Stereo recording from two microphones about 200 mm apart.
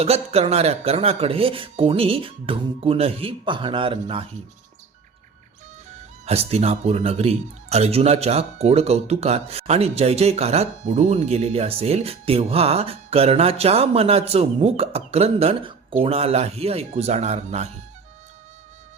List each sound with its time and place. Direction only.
0.0 s speech: 30° right (ahead or behind)
6.2 s speech: 30° right (ahead or behind)